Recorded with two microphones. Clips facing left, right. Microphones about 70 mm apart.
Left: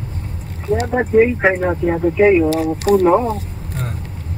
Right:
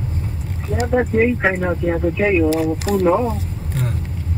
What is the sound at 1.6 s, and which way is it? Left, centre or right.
Speech, centre.